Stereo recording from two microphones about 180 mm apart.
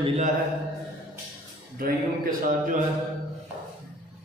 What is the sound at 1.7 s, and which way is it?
A man's voice, 50° right (ahead or behind).